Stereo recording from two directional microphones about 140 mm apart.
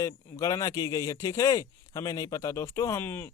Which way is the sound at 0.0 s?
25° left (ahead or behind).